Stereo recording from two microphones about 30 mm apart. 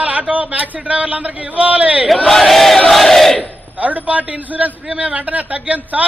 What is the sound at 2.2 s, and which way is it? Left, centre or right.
Battle cry, centre.